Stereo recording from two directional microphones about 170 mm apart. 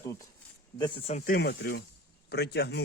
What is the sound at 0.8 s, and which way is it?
Speech, 35° left (ahead or behind).